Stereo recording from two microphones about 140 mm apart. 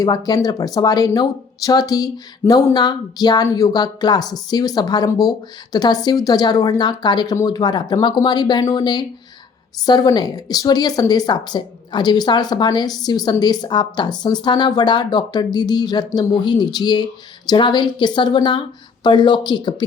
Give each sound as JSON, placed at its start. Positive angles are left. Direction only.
{"t": 0.0, "sound": "a woman's voice", "side_deg": 25}